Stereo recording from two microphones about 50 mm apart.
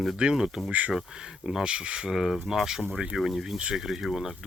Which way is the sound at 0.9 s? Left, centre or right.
Centre.